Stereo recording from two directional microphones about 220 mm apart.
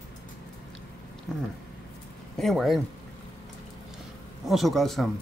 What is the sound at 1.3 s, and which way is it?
Speech, centre (ahead or behind).